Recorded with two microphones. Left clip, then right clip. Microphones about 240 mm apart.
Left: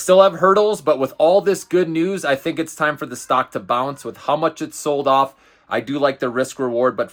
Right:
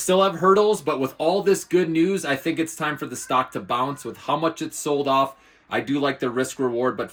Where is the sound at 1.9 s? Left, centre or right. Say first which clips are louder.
Left 1 dB; left.